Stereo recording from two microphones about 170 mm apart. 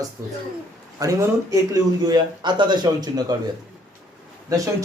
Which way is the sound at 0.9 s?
20° right (ahead or behind).